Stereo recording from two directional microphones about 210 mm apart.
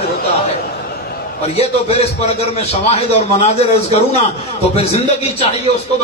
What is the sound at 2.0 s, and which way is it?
A man's voice, 30° left (ahead or behind).